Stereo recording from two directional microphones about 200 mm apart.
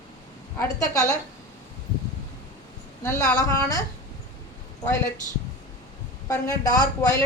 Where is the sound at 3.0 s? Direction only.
15° left (ahead or behind).